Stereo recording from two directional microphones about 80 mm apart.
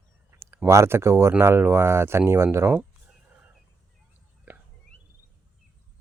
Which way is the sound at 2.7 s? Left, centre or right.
Centre.